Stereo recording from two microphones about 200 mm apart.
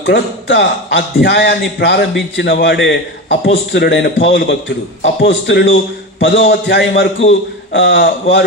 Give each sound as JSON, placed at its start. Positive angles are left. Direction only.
{"t": 0.0, "sound": "a man's voice", "side_deg": 65}